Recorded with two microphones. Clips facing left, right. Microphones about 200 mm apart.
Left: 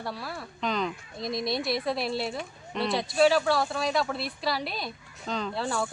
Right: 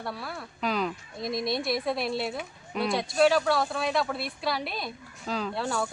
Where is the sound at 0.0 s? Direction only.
Centre (ahead or behind).